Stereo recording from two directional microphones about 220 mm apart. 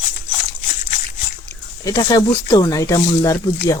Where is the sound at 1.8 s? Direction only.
15° left (ahead or behind).